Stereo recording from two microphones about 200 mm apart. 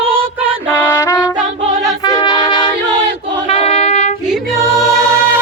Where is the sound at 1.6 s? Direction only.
35° right (ahead or behind).